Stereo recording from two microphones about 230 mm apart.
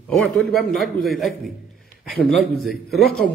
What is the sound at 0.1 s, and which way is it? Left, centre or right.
Speech, centre.